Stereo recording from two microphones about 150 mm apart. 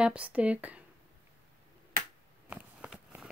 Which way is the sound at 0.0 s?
10° right (ahead or behind).